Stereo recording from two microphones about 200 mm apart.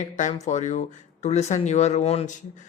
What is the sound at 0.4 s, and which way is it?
A man's voice, 35° left (ahead or behind).